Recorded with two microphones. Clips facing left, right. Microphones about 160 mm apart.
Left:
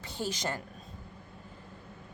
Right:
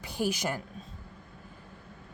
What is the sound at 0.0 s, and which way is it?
Speech, 10° right (ahead or behind).